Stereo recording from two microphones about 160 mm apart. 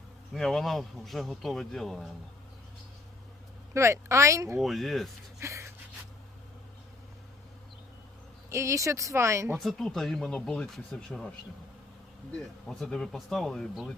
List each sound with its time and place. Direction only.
0.3 s speech: centre (ahead or behind)
3.8 s speech: 20° right (ahead or behind)
4.6 s speech: centre (ahead or behind)
5.4 s gasp: 20° right (ahead or behind)
8.4 s speech: 20° right (ahead or behind)
9.6 s speech: centre (ahead or behind)
12.4 s speech: 5° left (ahead or behind)